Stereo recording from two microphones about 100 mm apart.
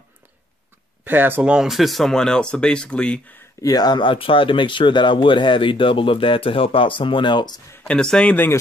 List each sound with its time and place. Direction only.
1.0 s speech: 20° right (ahead or behind)
1.4 s speech: 10° right (ahead or behind); by 3.4 s 15° left (ahead or behind)
3.6 s speech: 40° left (ahead or behind)
7.8 s speech: 10° left (ahead or behind)